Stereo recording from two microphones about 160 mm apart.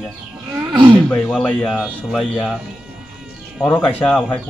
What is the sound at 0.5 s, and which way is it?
Roaring cats, 25° right (ahead or behind).